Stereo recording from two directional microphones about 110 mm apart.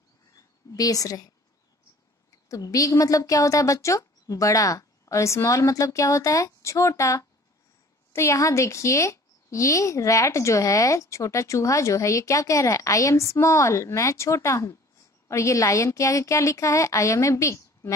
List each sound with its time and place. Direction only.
0.7 s a woman's voice: 35° left (ahead or behind)
2.3 s a woman's voice: 30° left (ahead or behind)